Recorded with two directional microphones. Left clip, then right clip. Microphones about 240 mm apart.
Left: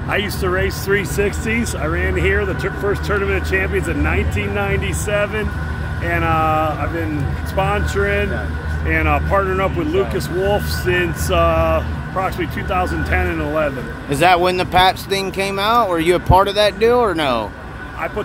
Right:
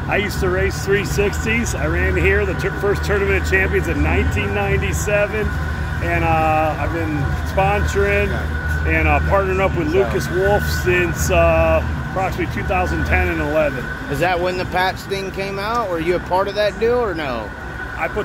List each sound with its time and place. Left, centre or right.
0.1 s speech: centre
14.1 s speech: left